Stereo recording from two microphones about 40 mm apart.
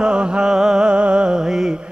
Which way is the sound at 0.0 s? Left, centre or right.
Right.